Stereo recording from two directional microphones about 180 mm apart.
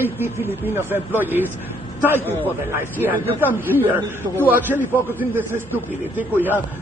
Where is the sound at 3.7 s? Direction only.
10° right (ahead or behind).